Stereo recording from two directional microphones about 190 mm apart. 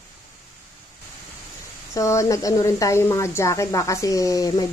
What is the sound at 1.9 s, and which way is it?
A woman's voice, 15° left (ahead or behind).